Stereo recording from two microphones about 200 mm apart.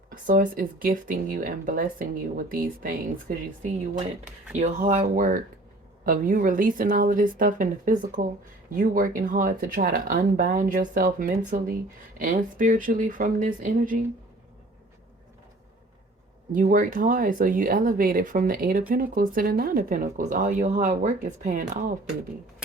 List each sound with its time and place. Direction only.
0.1 s speech: 45° right (ahead or behind)
16.5 s speech: 40° right (ahead or behind)